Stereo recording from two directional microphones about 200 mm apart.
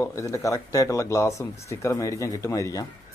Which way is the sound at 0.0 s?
15° left (ahead or behind).